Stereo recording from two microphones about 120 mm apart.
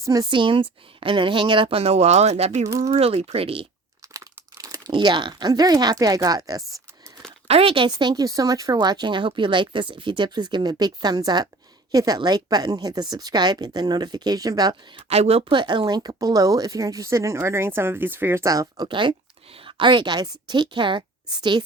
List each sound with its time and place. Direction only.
0.0 s speech: 30° right (ahead or behind)
0.3 s speech: 45° right (ahead or behind); by 2.6 s 70° right (ahead or behind)
2.8 s speech: 60° right (ahead or behind)
4.1 s speech: 30° right (ahead or behind)
7.4 s speech: 55° right (ahead or behind)
7.9 s speech: 35° right (ahead or behind)
15.1 s speech: 60° right (ahead or behind)
15.4 s speech: 40° right (ahead or behind)